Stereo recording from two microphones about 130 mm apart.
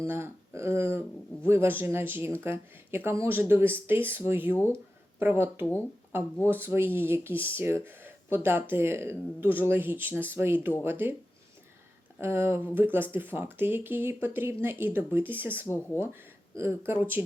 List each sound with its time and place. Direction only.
0.0 s speech: 20° right (ahead or behind)
12.2 s speech: 20° right (ahead or behind)
15.6 s speech: 20° left (ahead or behind)
16.6 s speech: 20° right (ahead or behind)